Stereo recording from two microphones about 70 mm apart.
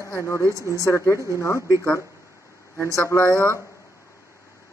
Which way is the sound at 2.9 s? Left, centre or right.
Left.